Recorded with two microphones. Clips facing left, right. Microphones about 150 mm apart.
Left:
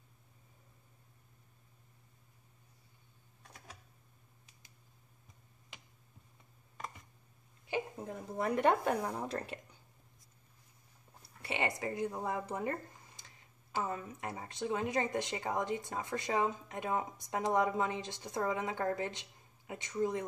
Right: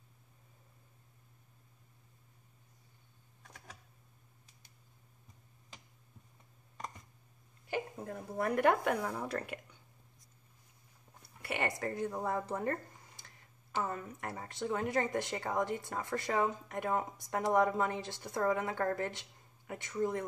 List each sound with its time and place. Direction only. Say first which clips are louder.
7.7 s speech: even; 20° left (ahead or behind)
11.4 s speech: even; 20° left (ahead or behind)